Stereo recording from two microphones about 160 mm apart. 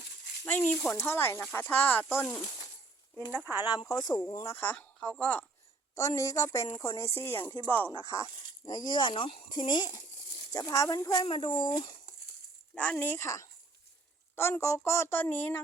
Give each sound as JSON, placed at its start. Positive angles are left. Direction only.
{"t": 0.4, "sound": "speech", "side_deg": 10}
{"t": 3.3, "sound": "speech", "side_deg": -15}
{"t": 3.7, "sound": "speech", "side_deg": 25}
{"t": 5.9, "sound": "speech", "side_deg": 20}
{"t": 8.6, "sound": "speech", "side_deg": 25}
{"t": 12.7, "sound": "speech", "side_deg": 10}